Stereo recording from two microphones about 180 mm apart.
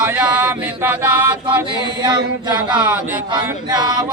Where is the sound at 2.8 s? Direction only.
10° right (ahead or behind).